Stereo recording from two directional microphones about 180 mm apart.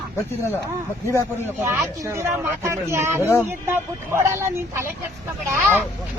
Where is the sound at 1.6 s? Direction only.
15° right (ahead or behind).